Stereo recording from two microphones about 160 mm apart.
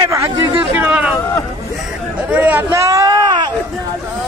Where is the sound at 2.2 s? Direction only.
10° right (ahead or behind).